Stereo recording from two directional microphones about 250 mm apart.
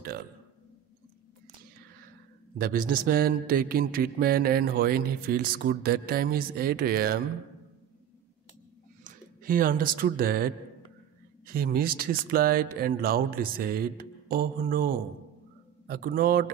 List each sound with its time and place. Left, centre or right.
2.6 s mantra: right
9.0 s speech: right
11.4 s mantra: right